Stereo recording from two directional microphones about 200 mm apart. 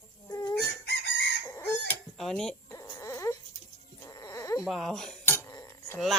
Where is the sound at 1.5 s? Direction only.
10° left (ahead or behind).